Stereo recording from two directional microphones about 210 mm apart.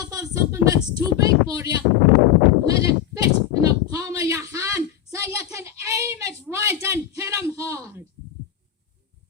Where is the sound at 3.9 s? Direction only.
15° right (ahead or behind).